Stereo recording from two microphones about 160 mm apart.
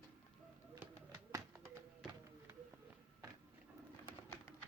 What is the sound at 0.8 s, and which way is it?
Tap, 15° right (ahead or behind).